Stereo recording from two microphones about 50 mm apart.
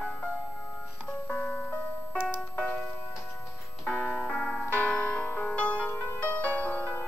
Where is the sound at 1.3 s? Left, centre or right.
Left.